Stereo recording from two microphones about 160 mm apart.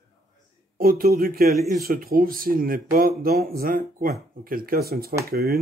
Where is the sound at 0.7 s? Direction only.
65° right (ahead or behind).